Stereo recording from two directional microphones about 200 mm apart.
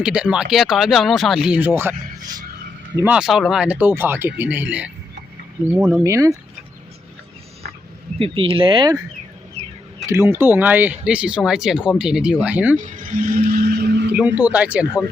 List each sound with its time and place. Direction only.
0.0 s speech: 5° right (ahead or behind)
8.2 s speech: 25° right (ahead or behind)
10.1 s speech: 10° right (ahead or behind)
12.7 s speech: 40° right (ahead or behind); by 14.1 s 55° right (ahead or behind)
14.1 s speech: 10° right (ahead or behind)